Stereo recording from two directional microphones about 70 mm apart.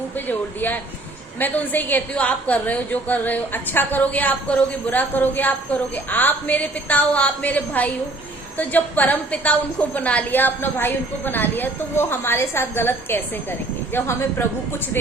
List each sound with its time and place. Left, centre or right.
0.3 s a woman's voice: left